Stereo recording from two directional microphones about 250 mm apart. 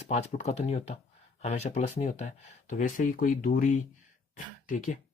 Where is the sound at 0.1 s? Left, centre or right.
Left.